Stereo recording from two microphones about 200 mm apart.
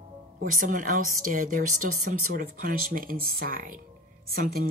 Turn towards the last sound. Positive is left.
turn(degrees=-45)  # may be behind; listen again after turning